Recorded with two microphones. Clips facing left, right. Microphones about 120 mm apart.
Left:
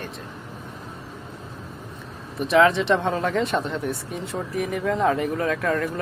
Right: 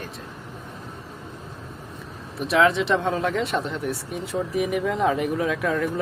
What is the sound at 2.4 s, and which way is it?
Speech, centre (ahead or behind).